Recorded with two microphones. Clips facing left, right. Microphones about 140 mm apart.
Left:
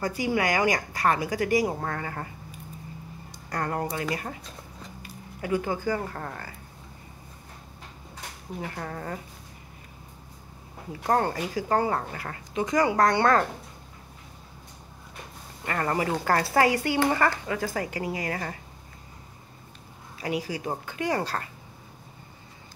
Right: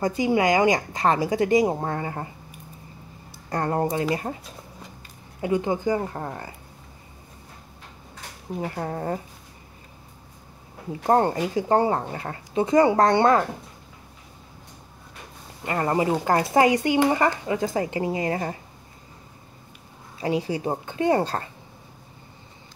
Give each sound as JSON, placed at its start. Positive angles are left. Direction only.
{"t": 0.0, "sound": "speech", "side_deg": -25}
{"t": 3.4, "sound": "speech", "side_deg": -25}
{"t": 5.4, "sound": "speech", "side_deg": -20}
{"t": 8.5, "sound": "speech", "side_deg": -30}
{"t": 10.9, "sound": "speech", "side_deg": -25}
{"t": 15.6, "sound": "speech", "side_deg": -20}
{"t": 20.2, "sound": "speech", "side_deg": -30}